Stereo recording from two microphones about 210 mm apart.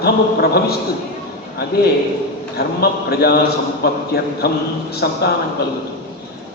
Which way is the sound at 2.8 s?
50° left (ahead or behind).